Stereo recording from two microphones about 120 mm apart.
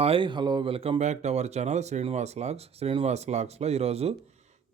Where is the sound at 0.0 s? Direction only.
45° right (ahead or behind).